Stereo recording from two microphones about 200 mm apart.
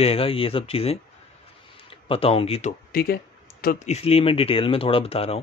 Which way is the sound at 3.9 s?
30° left (ahead or behind).